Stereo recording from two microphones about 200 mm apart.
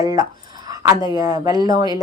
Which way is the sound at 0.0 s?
20° right (ahead or behind).